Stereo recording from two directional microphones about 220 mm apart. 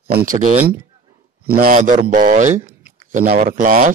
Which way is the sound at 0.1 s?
40° right (ahead or behind).